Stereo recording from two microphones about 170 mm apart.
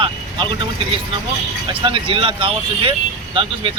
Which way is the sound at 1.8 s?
30° right (ahead or behind).